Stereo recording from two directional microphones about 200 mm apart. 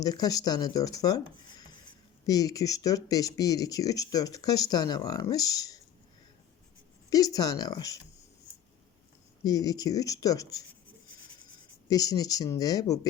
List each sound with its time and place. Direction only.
0.0 s speech: 20° left (ahead or behind)
7.1 s speech: 20° left (ahead or behind)
9.4 s speech: 20° left (ahead or behind)
11.9 s speech: 20° left (ahead or behind)